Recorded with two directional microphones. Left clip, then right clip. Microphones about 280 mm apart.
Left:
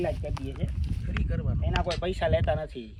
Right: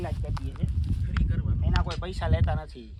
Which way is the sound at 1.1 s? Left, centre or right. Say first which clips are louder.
Left 2 dB; centre.